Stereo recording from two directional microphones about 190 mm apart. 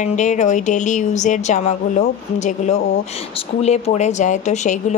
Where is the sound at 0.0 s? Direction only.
40° left (ahead or behind).